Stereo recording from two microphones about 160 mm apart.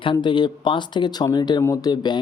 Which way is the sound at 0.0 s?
30° left (ahead or behind).